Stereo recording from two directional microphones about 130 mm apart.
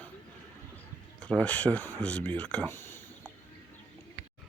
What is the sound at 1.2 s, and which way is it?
Speech, 5° left (ahead or behind).